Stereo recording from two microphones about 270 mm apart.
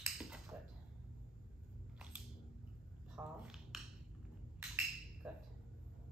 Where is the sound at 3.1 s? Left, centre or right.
Centre.